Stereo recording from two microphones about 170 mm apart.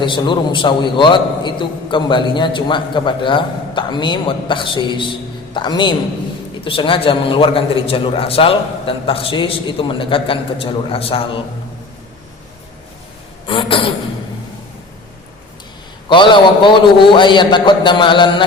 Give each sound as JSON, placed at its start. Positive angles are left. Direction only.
{"t": 0.0, "sound": "a man's voice", "side_deg": 30}
{"t": 13.5, "sound": "a man's voice", "side_deg": 30}
{"t": 16.0, "sound": "a man's voice", "side_deg": 30}